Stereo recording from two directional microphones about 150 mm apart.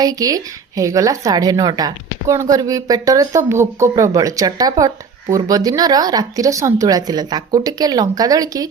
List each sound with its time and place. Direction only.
0.0 s speech: 25° right (ahead or behind)